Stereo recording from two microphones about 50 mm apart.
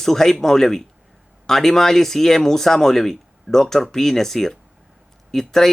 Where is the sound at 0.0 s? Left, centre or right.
Centre.